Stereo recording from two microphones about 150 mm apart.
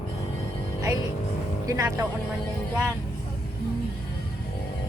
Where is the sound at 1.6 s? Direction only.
20° right (ahead or behind).